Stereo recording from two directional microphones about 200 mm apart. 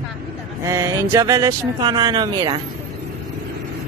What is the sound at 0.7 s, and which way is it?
Speech, 15° right (ahead or behind).